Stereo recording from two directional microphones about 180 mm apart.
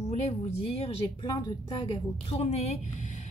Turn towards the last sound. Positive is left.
turn(degrees=40)  # may be behind; listen again after turning